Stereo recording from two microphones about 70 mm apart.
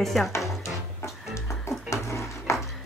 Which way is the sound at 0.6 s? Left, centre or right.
Left.